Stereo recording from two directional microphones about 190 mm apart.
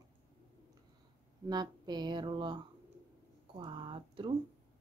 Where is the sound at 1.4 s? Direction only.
20° right (ahead or behind).